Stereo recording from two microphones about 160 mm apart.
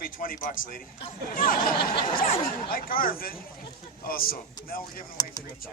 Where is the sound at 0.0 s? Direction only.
60° left (ahead or behind).